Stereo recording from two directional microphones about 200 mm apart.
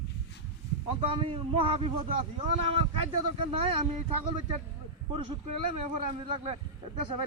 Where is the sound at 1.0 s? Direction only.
25° right (ahead or behind).